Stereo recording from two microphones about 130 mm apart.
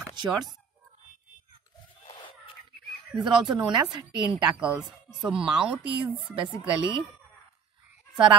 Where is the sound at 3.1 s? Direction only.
35° right (ahead or behind).